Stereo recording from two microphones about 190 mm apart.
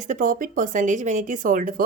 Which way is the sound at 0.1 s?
45° right (ahead or behind).